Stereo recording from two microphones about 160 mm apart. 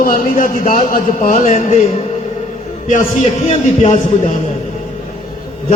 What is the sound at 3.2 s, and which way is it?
Speech, 55° left (ahead or behind).